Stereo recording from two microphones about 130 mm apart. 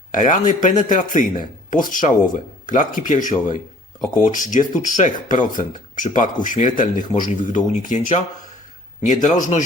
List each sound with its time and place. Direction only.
0.1 s speech: 75° left (ahead or behind)